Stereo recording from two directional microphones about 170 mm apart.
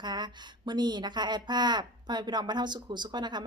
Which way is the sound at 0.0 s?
25° right (ahead or behind).